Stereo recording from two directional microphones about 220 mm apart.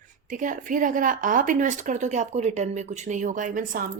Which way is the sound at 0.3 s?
35° right (ahead or behind).